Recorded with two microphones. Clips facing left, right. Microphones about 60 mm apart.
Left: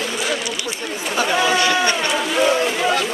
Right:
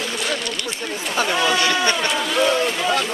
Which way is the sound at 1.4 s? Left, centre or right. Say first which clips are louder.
Left 2 dB; centre.